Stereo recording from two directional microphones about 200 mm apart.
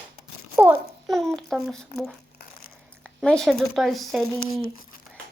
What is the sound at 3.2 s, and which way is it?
Speech, 5° left (ahead or behind).